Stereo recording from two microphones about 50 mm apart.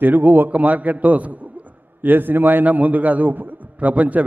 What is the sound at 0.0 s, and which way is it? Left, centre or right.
A man's voice, right.